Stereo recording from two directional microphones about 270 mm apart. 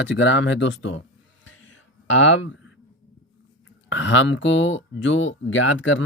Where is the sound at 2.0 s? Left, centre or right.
Left.